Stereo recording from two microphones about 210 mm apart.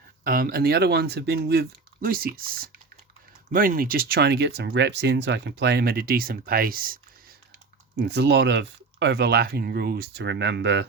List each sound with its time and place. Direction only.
0.3 s speech: 45° right (ahead or behind)
7.9 s speech: 55° right (ahead or behind)